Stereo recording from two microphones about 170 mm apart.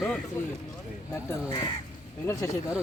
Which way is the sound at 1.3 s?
20° left (ahead or behind).